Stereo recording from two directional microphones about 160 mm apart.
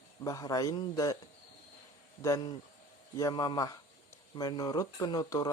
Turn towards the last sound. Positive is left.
turn(degrees=25)  # may be behind; listen again after turning